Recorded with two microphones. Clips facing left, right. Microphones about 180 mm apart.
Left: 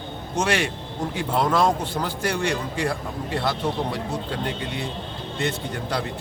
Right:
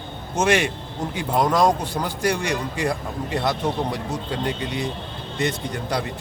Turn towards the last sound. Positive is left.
turn(degrees=-15)  # may be behind; listen again after turning